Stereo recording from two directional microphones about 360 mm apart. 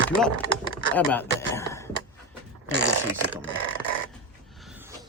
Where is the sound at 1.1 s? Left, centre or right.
Centre.